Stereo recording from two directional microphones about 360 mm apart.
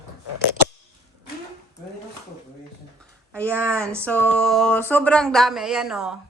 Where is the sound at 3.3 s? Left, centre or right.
Centre.